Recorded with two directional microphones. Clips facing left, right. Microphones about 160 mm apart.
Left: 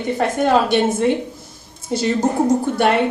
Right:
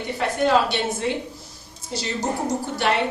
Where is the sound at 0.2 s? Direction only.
50° left (ahead or behind).